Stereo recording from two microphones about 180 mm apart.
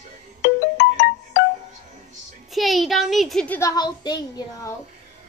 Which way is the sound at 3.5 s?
20° left (ahead or behind).